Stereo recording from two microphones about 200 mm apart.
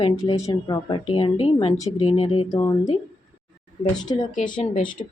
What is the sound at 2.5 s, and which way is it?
Speech, 15° left (ahead or behind).